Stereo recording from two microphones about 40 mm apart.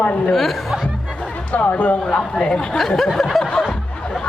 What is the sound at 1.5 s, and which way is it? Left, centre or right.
Speech, left.